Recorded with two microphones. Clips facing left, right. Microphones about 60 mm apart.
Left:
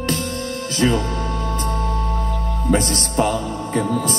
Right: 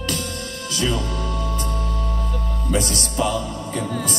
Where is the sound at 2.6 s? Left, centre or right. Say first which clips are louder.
Left 4 dB; left.